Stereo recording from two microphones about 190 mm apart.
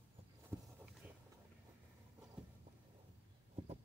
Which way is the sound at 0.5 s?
15° right (ahead or behind).